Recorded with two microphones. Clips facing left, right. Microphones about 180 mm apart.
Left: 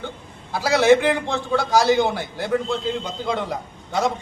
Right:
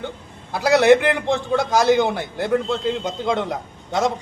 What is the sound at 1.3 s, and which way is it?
A man's voice, 20° right (ahead or behind).